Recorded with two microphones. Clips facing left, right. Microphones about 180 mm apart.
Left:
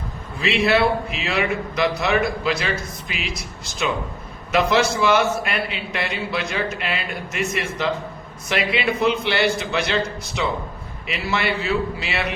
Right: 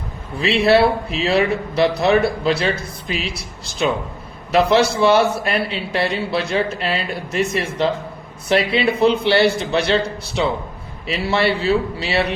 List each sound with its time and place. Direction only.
0.3 s a man's voice: 35° right (ahead or behind)
4.5 s a man's voice: 35° right (ahead or behind)